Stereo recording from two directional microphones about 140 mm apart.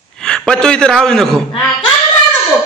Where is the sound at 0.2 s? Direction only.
5° left (ahead or behind).